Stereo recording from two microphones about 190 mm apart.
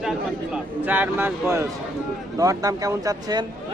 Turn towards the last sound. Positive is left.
turn(degrees=-20)  # may be behind; listen again after turning